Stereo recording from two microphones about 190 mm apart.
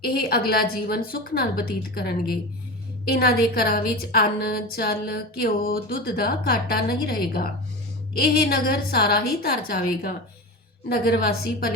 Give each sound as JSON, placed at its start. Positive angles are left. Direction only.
{"t": 0.0, "sound": "a woman's voice", "side_deg": 55}